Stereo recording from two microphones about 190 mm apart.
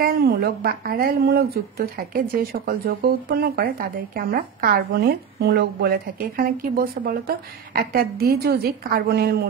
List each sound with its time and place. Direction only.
0.0 s speech: 50° right (ahead or behind)